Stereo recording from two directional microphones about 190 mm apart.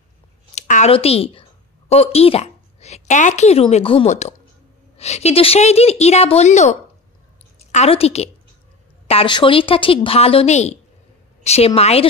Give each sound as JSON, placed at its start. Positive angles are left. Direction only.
{"t": 0.6, "sound": "a woman's voice", "side_deg": 40}